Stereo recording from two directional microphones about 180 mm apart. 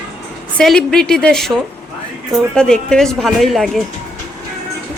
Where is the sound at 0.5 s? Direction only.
5° left (ahead or behind).